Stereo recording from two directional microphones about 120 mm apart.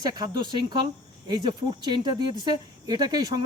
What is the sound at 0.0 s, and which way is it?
Speech, 35° right (ahead or behind).